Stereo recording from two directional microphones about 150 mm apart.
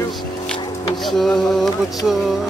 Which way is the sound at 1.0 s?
Centre (ahead or behind).